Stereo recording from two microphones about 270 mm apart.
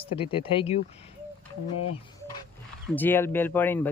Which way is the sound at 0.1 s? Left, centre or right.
Centre.